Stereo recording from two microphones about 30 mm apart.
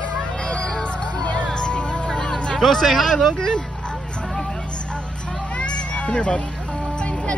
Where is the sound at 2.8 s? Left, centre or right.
Centre.